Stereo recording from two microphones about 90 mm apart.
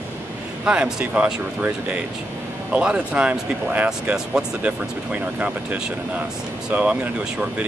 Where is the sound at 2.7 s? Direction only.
10° right (ahead or behind).